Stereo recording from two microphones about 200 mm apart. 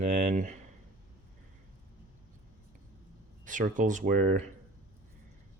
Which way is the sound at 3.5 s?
40° right (ahead or behind).